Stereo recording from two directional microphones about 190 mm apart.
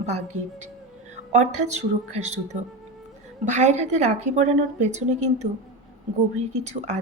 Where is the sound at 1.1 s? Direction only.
40° right (ahead or behind).